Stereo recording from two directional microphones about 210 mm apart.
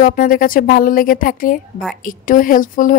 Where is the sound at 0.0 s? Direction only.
40° left (ahead or behind).